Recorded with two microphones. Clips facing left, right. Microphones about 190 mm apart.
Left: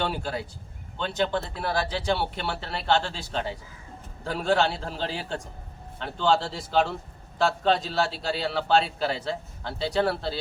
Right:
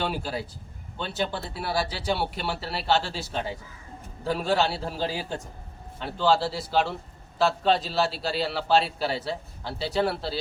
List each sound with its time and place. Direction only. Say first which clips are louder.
0.0 s a man's voice: even; 5° right (ahead or behind)